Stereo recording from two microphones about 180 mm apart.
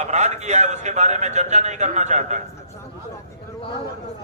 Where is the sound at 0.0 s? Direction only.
40° right (ahead or behind).